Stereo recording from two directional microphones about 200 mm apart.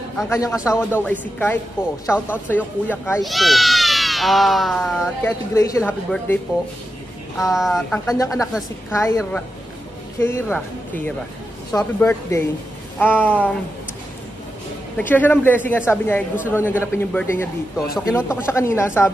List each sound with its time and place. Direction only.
0.3 s speech: 15° left (ahead or behind)
5.2 s speech: 15° left (ahead or behind)
7.5 s speech: centre (ahead or behind)
8.1 s speech: 15° left (ahead or behind)
15.0 s speech: 10° left (ahead or behind)